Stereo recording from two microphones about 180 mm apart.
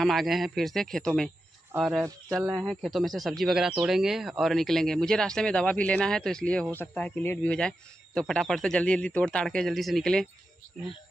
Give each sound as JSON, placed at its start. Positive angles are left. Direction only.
{"t": 0.0, "sound": "speech", "side_deg": 0}
{"t": 2.3, "sound": "speech", "side_deg": -20}
{"t": 2.6, "sound": "speech", "side_deg": 0}